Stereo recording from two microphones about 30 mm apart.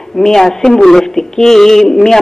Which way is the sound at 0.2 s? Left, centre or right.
Centre.